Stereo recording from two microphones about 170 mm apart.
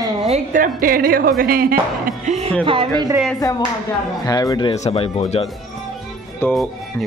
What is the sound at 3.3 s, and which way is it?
Speech, 20° left (ahead or behind).